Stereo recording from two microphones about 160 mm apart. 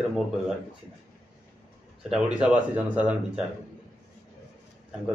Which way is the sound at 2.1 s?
5° right (ahead or behind).